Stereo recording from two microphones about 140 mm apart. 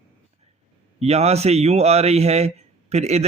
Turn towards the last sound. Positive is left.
turn(degrees=-50)  # may be behind; listen again after turning